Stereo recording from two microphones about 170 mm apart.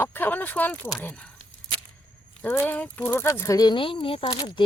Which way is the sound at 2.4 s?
10° left (ahead or behind).